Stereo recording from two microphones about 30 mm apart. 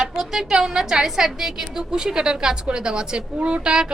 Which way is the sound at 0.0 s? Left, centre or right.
Centre.